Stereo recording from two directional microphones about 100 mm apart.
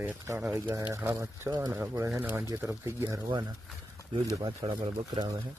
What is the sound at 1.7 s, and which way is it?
Speech, 30° right (ahead or behind).